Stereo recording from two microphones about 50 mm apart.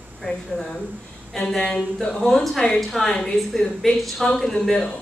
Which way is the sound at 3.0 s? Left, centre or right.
Centre.